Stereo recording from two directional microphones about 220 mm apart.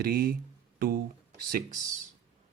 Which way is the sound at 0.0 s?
45° right (ahead or behind).